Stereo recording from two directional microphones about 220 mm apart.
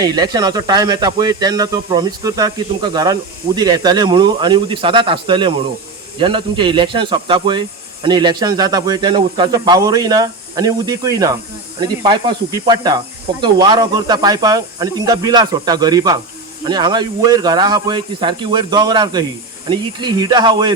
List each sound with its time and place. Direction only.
0.0 s speech: 20° right (ahead or behind)